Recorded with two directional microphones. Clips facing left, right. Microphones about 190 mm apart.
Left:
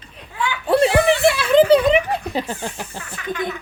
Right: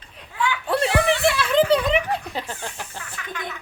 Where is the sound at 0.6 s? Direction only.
10° left (ahead or behind).